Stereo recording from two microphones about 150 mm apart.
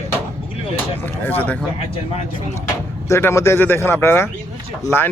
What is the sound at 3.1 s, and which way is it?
Speech, 20° left (ahead or behind).